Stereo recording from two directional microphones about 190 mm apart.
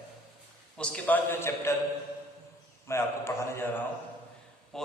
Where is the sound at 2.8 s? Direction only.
15° left (ahead or behind).